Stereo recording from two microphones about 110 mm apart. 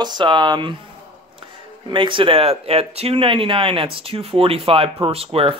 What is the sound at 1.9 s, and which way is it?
Speech, 50° right (ahead or behind).